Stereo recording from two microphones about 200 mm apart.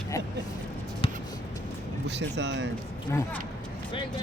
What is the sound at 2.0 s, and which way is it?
Speech, 60° right (ahead or behind).